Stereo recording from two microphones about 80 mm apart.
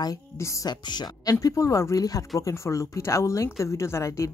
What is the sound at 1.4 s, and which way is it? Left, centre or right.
Speech, left.